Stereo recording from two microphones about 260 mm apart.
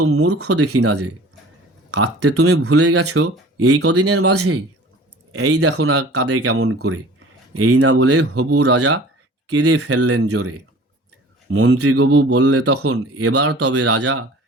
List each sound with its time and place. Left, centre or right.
0.1 s speech: right
2.0 s speech: right
11.5 s speech: right